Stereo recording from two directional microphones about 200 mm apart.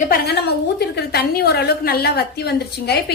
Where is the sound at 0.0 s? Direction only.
50° left (ahead or behind).